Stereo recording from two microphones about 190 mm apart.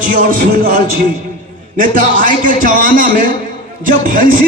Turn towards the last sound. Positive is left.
turn(degrees=-45)  # may be behind; listen again after turning